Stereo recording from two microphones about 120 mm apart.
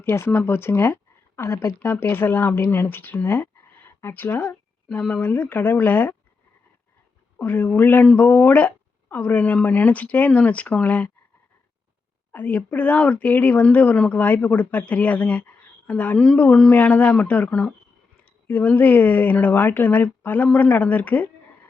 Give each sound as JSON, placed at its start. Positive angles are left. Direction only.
{"t": 0.0, "sound": "speech", "side_deg": 20}
{"t": 7.3, "sound": "speech", "side_deg": 15}
{"t": 12.3, "sound": "speech", "side_deg": 15}